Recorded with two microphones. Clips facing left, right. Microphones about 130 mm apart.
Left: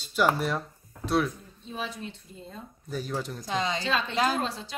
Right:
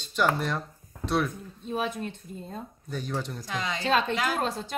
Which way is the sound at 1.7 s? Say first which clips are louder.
Right 5 dB; 55° right (ahead or behind).